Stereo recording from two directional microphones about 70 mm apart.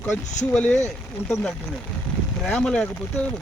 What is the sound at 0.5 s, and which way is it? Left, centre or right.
Speech, left.